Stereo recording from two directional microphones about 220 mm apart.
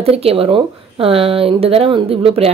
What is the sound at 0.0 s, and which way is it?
A woman's voice, 25° right (ahead or behind).